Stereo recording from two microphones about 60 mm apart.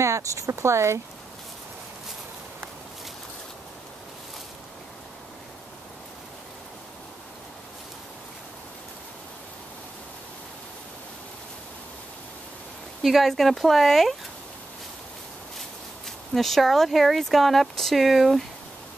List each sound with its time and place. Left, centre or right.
0.0 s speech: right
13.0 s speech: centre
16.3 s speech: centre